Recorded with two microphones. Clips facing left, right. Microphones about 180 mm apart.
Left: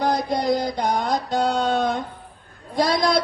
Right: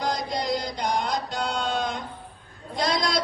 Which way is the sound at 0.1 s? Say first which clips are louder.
Left 6 dB; 55° left (ahead or behind).